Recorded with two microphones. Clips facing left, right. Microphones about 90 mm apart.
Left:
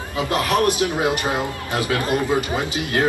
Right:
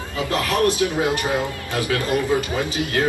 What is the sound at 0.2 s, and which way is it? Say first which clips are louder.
A man's voice: left 1 dB; 20° left (ahead or behind).